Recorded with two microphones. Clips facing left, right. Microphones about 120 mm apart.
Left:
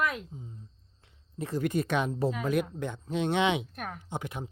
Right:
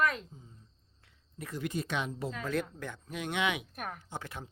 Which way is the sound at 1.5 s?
55° left (ahead or behind).